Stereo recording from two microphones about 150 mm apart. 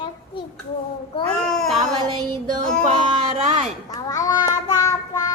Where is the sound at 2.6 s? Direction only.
5° left (ahead or behind).